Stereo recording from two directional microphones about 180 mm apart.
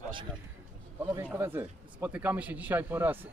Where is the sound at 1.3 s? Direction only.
10° right (ahead or behind).